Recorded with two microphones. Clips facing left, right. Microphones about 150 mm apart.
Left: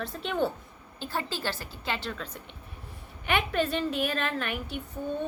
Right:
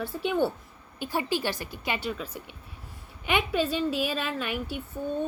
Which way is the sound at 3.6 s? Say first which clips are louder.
Right 1 dB; 55° left (ahead or behind).